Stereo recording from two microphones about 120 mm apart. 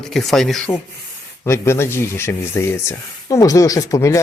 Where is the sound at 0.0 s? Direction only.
5° left (ahead or behind).